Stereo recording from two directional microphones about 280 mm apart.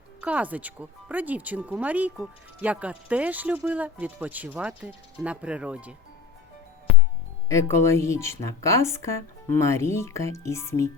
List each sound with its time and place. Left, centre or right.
0.2 s speech: centre
7.4 s speech: centre